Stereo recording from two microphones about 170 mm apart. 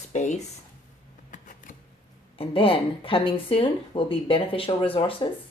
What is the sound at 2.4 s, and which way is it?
Speech, 30° left (ahead or behind).